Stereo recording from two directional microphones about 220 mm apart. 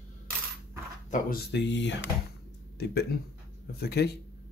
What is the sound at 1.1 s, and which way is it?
Speech, 45° left (ahead or behind).